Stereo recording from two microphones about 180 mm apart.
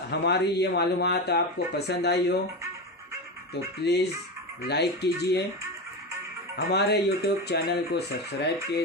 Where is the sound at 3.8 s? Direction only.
65° left (ahead or behind).